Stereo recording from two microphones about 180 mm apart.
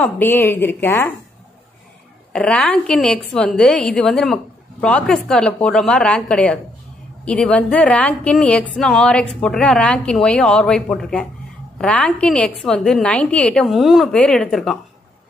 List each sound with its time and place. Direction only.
0.0 s a woman's voice: 10° left (ahead or behind)
2.3 s a woman's voice: 5° left (ahead or behind)